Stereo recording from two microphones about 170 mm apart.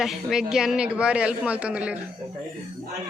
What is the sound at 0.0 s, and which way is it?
A man's voice, centre (ahead or behind).